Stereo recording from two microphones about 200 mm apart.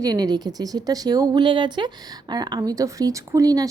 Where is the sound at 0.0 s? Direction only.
20° right (ahead or behind).